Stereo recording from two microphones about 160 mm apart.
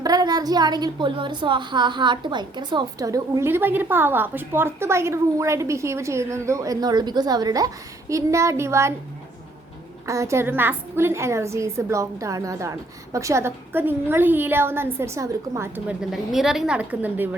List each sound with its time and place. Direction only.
0.0 s a woman's voice: 25° right (ahead or behind)
10.1 s a woman's voice: 20° right (ahead or behind)